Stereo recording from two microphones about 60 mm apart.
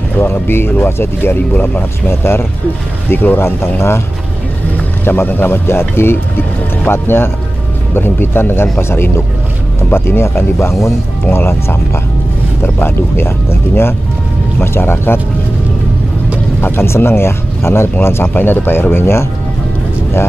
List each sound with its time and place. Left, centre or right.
0.2 s speech: left
5.0 s speech: left
16.6 s speech: left